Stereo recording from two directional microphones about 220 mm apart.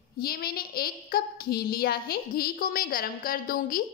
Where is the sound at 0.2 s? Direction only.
45° left (ahead or behind).